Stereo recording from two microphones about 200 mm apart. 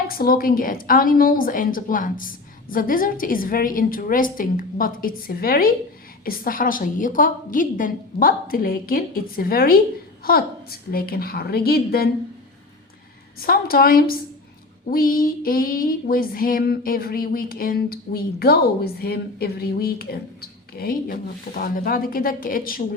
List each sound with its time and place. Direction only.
0.1 s female singing: 45° left (ahead or behind)
13.4 s female singing: 45° left (ahead or behind)